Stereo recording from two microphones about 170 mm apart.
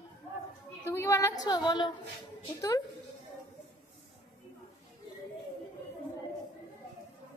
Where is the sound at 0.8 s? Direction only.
15° left (ahead or behind).